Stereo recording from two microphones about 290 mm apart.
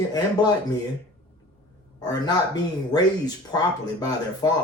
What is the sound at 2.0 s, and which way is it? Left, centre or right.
Speech, centre.